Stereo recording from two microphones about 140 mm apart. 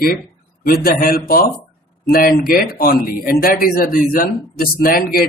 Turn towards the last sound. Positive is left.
turn(degrees=90)